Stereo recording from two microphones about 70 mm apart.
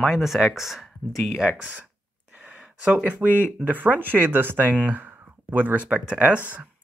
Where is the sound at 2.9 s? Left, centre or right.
Right.